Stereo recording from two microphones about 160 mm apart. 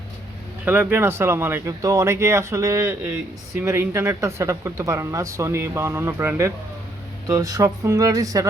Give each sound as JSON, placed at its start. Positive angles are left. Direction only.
{"t": 0.6, "sound": "speech", "side_deg": -10}